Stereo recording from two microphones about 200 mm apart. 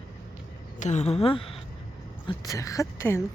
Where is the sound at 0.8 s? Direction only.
35° left (ahead or behind).